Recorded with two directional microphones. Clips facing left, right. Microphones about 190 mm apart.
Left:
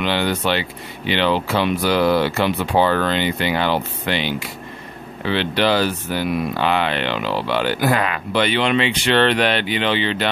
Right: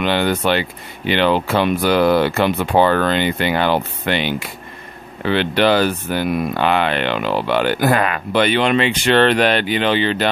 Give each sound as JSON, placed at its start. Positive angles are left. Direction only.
{"t": 0.0, "sound": "speech", "side_deg": -50}